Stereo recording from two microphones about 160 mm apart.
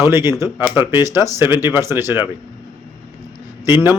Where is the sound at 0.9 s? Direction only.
15° right (ahead or behind).